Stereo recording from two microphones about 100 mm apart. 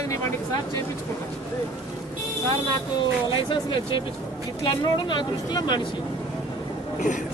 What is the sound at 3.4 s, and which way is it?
A woman's voice, 55° left (ahead or behind).